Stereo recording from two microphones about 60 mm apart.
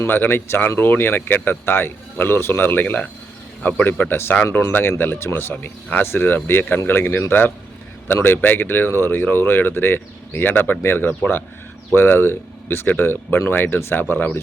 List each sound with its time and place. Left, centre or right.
0.1 s speech: left
14.0 s speech: left